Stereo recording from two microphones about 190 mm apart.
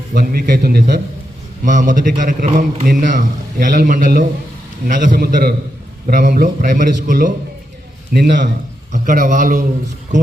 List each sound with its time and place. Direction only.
0.1 s a man's voice: 50° right (ahead or behind)
8.1 s a man's voice: 60° right (ahead or behind)
8.9 s a man's voice: 45° right (ahead or behind)